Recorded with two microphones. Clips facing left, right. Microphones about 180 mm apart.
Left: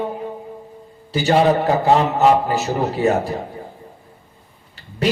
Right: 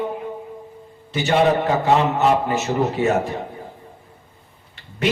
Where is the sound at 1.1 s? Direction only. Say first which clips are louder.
Left 2 dB; 35° left (ahead or behind).